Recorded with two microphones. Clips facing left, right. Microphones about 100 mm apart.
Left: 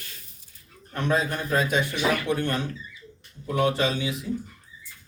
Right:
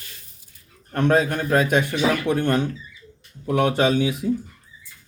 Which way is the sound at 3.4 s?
55° right (ahead or behind).